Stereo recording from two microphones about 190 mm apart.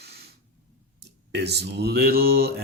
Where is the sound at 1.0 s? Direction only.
60° right (ahead or behind).